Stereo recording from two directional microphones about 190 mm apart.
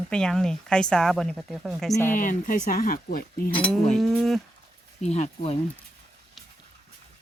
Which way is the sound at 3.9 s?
Centre (ahead or behind).